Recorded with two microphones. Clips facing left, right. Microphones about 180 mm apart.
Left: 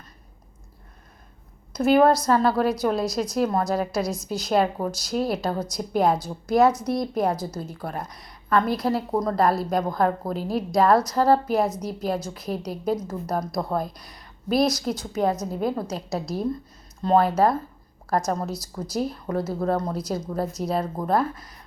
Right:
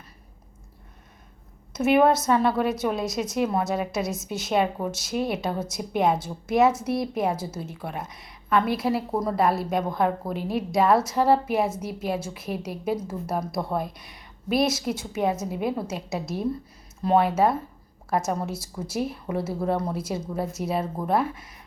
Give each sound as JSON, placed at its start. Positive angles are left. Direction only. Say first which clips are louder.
{"t": 1.7, "sound": "a woman's voice", "louder": "left 2 dB", "side_deg": -5}